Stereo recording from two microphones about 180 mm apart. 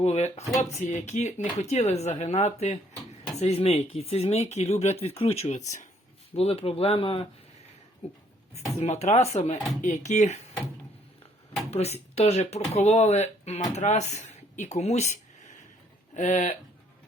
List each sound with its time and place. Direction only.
0.0 s speech: 35° left (ahead or behind)
11.7 s speech: 35° left (ahead or behind)